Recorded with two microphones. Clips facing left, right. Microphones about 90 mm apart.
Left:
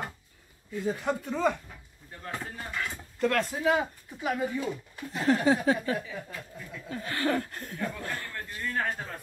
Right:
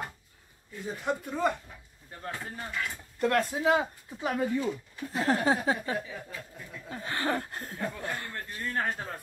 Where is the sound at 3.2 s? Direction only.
20° right (ahead or behind).